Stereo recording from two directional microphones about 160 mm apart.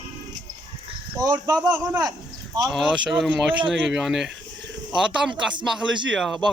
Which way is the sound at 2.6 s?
5° right (ahead or behind).